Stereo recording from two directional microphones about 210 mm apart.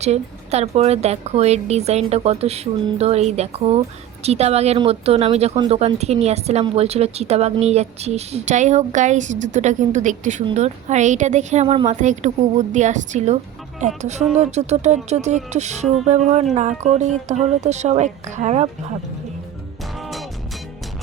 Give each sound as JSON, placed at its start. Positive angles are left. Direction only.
{"t": 0.0, "sound": "speech", "side_deg": -30}
{"t": 20.0, "sound": "music", "side_deg": 0}